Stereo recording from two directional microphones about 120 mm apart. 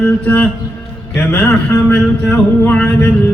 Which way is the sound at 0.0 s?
15° left (ahead or behind).